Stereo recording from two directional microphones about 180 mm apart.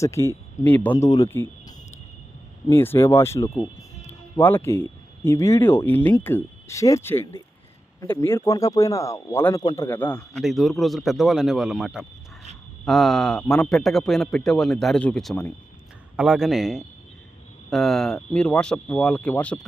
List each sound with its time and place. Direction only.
0.0 s a man's voice: 15° left (ahead or behind)